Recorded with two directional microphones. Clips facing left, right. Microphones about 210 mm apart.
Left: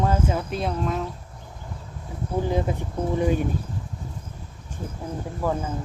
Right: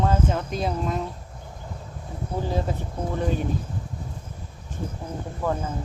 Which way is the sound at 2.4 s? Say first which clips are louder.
Left 1 dB; 15° left (ahead or behind).